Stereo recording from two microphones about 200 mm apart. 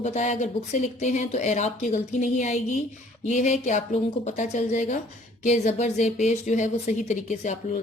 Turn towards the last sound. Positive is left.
turn(degrees=35)  # may be behind; listen again after turning